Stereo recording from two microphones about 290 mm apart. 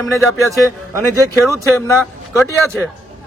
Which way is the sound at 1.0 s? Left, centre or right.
Centre.